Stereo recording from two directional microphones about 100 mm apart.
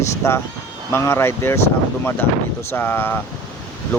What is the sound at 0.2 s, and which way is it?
Speech, 25° left (ahead or behind).